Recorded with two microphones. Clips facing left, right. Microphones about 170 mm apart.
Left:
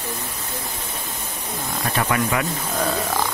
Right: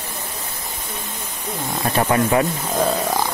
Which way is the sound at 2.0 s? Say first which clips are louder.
Right 5 dB; 30° right (ahead or behind).